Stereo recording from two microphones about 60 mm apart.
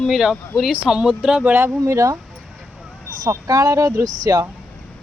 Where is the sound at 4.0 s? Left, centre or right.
Right.